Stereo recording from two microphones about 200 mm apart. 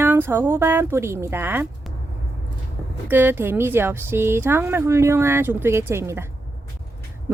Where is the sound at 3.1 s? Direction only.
10° right (ahead or behind).